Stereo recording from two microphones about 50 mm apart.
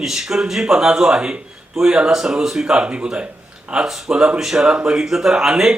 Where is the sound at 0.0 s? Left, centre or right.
Centre.